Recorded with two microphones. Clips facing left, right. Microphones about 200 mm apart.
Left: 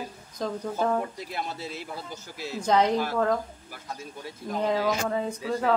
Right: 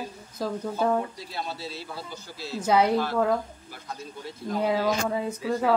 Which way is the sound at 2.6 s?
10° right (ahead or behind).